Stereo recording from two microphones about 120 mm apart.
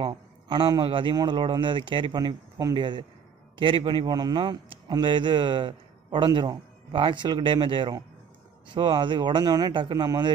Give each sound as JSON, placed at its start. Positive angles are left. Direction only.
{"t": 0.0, "sound": "a man's voice", "side_deg": -45}